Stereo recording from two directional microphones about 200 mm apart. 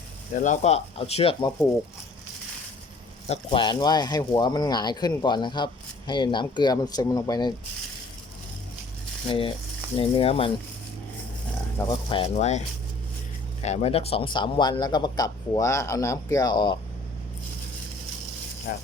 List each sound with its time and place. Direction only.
0.3 s speech: 40° left (ahead or behind); by 1.6 s 20° left (ahead or behind)
3.2 s speech: 30° left (ahead or behind)
9.2 s speech: 25° left (ahead or behind)
11.8 s speech: 20° left (ahead or behind)
18.7 s speech: 50° left (ahead or behind)